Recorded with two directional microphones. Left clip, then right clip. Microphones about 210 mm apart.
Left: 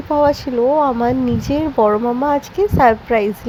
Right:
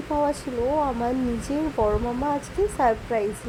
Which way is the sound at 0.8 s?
25° left (ahead or behind).